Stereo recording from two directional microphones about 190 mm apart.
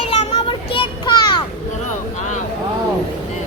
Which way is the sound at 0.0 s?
35° left (ahead or behind).